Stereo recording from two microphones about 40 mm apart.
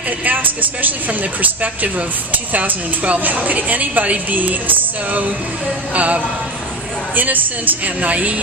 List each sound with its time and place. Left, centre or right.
0.3 s a woman's voice: right
5.9 s speech: right
7.2 s a woman's voice: right